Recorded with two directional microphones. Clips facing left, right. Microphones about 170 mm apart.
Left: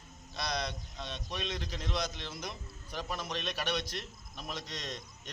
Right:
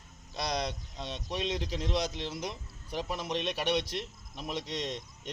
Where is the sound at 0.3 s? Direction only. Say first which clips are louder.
Right 3 dB; 40° right (ahead or behind).